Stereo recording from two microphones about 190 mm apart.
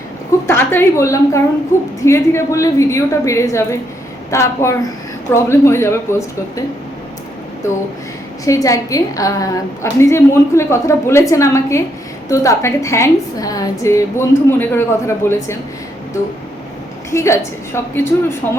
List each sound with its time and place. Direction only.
0.4 s a woman's voice: 10° left (ahead or behind)
8.4 s a woman's voice: 15° left (ahead or behind)
17.1 s a woman's voice: 15° left (ahead or behind)